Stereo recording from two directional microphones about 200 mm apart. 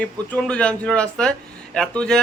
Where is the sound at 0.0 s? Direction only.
5° left (ahead or behind).